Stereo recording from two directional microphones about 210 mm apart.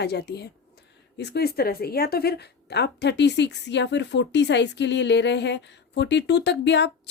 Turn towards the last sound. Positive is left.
turn(degrees=55)  # may be behind; listen again after turning